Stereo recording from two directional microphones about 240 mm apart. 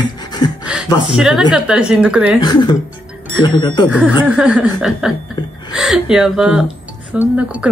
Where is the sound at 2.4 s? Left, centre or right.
Centre.